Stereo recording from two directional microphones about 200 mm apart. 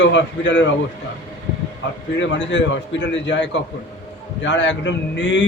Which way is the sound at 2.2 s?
65° left (ahead or behind).